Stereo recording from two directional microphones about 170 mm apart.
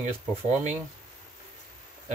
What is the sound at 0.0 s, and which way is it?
Speech, 45° right (ahead or behind).